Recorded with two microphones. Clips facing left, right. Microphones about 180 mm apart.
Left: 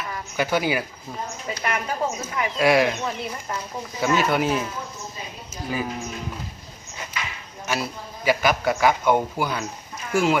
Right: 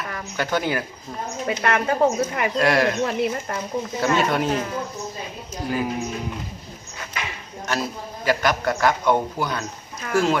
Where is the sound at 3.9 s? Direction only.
5° left (ahead or behind).